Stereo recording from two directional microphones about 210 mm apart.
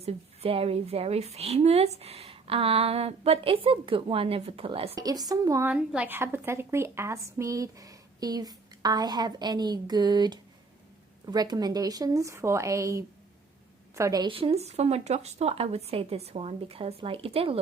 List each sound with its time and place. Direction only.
0.0 s a woman's voice: 25° right (ahead or behind)